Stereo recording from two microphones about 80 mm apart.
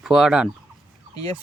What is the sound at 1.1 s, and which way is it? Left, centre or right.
Speech, left.